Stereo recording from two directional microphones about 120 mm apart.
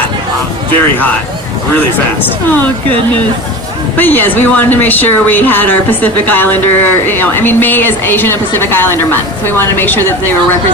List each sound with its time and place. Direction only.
3.9 s speech: 15° left (ahead or behind)